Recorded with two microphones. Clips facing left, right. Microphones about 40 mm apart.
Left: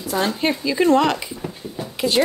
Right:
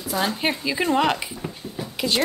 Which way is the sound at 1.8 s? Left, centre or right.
Centre.